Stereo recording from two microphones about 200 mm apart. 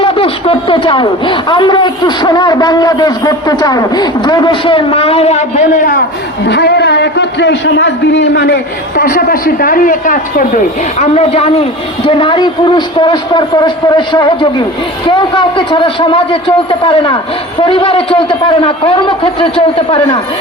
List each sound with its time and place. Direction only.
0.0 s a man's voice: 25° left (ahead or behind); by 6.0 s 45° left (ahead or behind)
6.5 s a man's voice: 55° left (ahead or behind)
9.0 s a woman's voice: 45° left (ahead or behind)
11.1 s a man's voice: 30° left (ahead or behind)